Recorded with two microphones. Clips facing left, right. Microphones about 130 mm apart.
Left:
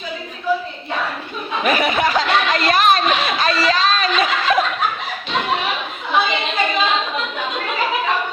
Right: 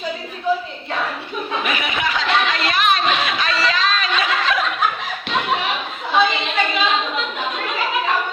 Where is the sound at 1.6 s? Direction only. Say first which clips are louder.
Left 10 dB; 40° left (ahead or behind).